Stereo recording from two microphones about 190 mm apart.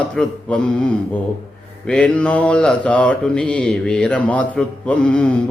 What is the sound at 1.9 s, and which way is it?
Speech, 5° left (ahead or behind).